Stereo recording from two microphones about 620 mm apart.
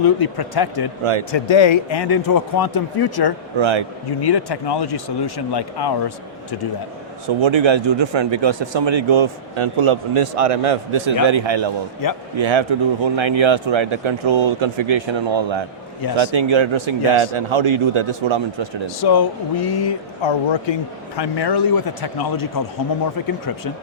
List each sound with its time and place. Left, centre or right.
0.0 s speech: left
3.6 s a man's voice: right
4.2 s speech: left
7.4 s a man's voice: right
12.0 s speech: left
12.4 s a man's voice: right
18.9 s speech: left